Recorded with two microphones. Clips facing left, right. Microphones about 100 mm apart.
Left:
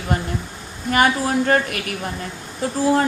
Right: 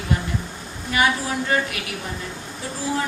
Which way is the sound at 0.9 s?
50° left (ahead or behind).